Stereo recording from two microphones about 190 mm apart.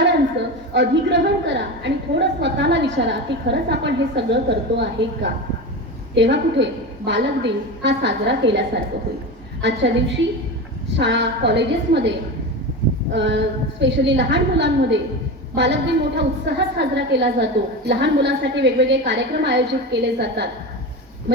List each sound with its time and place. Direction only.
0.7 s a woman's voice: 65° right (ahead or behind)
13.1 s a woman's voice: 70° right (ahead or behind)